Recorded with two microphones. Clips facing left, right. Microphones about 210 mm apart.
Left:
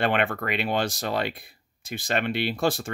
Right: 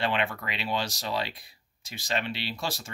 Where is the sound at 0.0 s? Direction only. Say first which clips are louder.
Left 5 dB; 55° left (ahead or behind).